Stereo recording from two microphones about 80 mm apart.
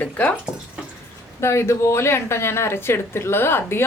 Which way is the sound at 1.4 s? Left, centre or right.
Left.